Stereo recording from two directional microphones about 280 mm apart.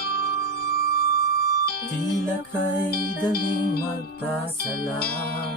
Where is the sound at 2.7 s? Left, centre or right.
Left.